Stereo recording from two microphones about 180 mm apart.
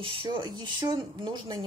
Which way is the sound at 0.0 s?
25° right (ahead or behind).